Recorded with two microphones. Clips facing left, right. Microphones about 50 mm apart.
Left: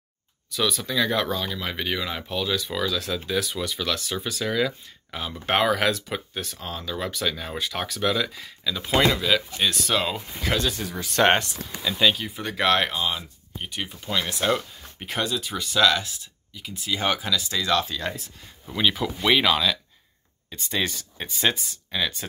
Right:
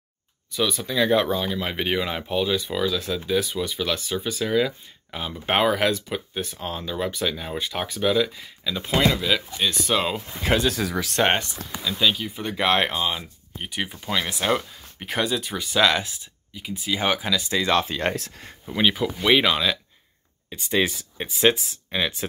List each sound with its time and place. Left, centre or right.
0.6 s speech: centre
0.9 s speech: centre
6.4 s speech: right
10.7 s speech: right
11.8 s speech: centre
12.4 s speech: centre
15.0 s speech: centre; by 18.1 s right
18.7 s speech: centre